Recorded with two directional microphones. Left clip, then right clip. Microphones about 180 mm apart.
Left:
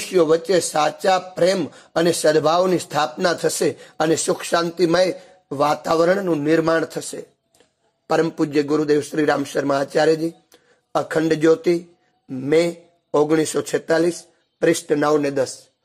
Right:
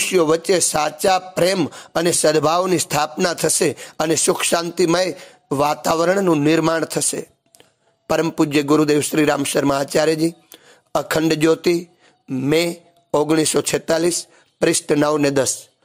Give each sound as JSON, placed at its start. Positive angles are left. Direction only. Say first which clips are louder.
{"t": 0.0, "sound": "speech", "louder": "right 1 dB", "side_deg": -25}